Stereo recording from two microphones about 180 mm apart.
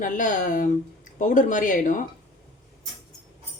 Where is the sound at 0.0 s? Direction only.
45° left (ahead or behind).